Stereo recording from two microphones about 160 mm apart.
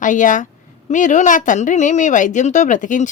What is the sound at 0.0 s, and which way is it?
A woman's voice, 55° left (ahead or behind).